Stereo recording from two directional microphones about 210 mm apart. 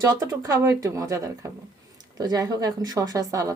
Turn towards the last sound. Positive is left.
turn(degrees=-15)  # may be behind; listen again after turning